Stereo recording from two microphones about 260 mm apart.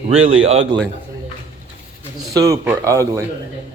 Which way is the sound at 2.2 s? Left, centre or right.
Centre.